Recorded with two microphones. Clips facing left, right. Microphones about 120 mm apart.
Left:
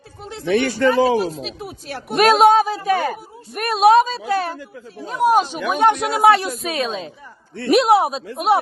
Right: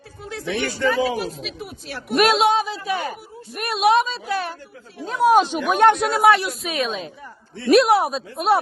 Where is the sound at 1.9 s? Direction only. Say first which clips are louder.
Left 3 dB; 45° left (ahead or behind).